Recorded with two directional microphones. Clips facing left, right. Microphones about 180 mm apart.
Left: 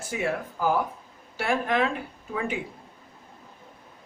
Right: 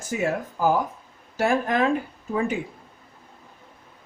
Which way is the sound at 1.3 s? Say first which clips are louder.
Right 3 dB; 40° right (ahead or behind).